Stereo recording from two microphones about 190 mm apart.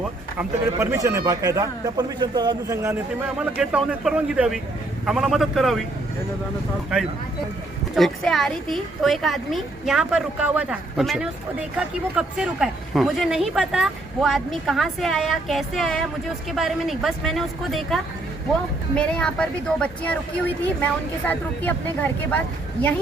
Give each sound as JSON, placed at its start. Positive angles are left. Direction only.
{"t": 0.3, "sound": "a man's voice", "side_deg": -15}
{"t": 3.6, "sound": "speech", "side_deg": -5}
{"t": 7.9, "sound": "speech", "side_deg": 0}